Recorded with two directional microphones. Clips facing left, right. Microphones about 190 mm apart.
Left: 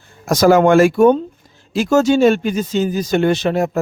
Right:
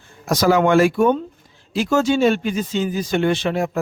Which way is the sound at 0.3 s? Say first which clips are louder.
Left 5 dB; 45° left (ahead or behind).